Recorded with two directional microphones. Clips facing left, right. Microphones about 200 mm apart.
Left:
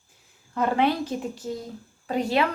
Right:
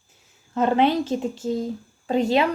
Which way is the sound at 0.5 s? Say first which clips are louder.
Right 4 dB; 25° right (ahead or behind).